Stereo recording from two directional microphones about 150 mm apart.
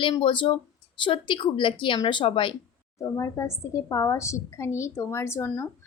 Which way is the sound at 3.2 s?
20° left (ahead or behind).